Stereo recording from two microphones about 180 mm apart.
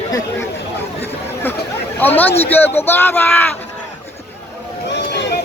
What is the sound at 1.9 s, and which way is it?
Speech, 10° left (ahead or behind).